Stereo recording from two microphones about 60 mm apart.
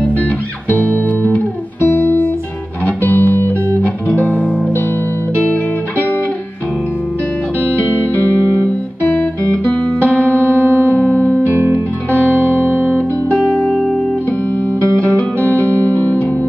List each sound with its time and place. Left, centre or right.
0.0 s music: left
3.8 s music: left
8.6 s music: left
10.4 s music: right
11.0 s music: left
11.4 s music: right
12.9 s music: left
15.5 s music: left